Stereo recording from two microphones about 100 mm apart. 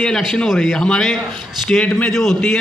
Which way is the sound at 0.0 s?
Centre (ahead or behind).